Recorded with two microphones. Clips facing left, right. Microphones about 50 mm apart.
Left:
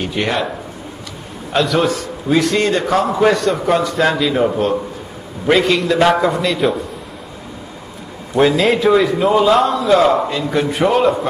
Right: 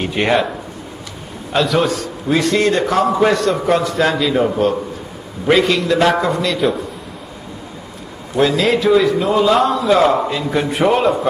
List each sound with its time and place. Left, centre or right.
0.0 s speech: centre
1.5 s a man's voice: centre
8.5 s a man's voice: centre